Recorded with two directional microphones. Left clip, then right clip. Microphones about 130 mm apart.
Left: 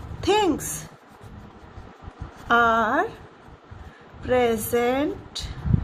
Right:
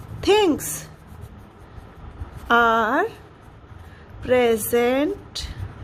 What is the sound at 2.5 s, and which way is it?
Speech, 75° right (ahead or behind).